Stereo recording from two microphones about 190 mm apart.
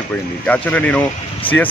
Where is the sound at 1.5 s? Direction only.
25° left (ahead or behind).